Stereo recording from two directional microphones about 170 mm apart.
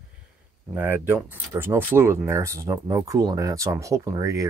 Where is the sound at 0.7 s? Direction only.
10° right (ahead or behind).